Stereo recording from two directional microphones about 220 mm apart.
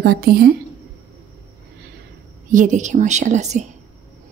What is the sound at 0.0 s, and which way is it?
Speech, 45° right (ahead or behind).